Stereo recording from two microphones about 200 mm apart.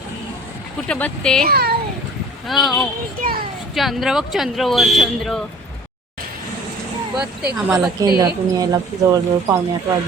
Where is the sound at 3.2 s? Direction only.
45° right (ahead or behind).